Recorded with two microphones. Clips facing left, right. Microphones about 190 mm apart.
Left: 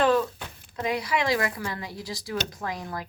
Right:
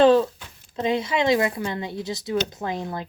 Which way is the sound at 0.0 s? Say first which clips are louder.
Right 6 dB; 30° right (ahead or behind).